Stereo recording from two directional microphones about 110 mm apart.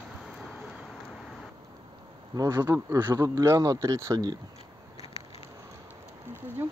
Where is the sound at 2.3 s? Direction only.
30° right (ahead or behind).